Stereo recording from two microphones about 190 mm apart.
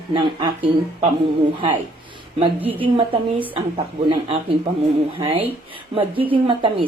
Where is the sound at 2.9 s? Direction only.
30° right (ahead or behind).